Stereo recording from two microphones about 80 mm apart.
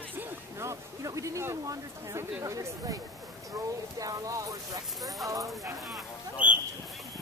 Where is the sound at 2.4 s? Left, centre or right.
Right.